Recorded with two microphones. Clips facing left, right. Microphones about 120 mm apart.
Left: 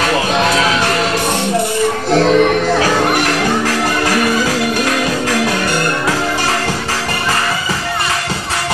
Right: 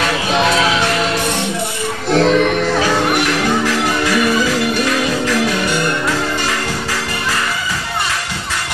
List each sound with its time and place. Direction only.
0.3 s music: centre (ahead or behind)
2.0 s music: centre (ahead or behind)
3.6 s music: 45° left (ahead or behind)